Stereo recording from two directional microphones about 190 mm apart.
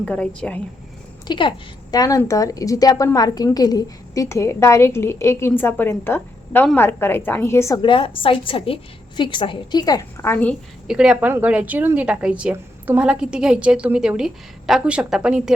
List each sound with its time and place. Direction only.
0.0 s a woman's voice: 5° left (ahead or behind)
1.3 s a woman's voice: 25° left (ahead or behind)
7.8 s a woman's voice: 25° left (ahead or behind)
10.8 s a woman's voice: 5° right (ahead or behind)